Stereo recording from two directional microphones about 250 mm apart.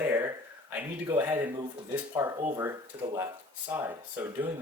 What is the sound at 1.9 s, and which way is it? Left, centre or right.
Speech, centre.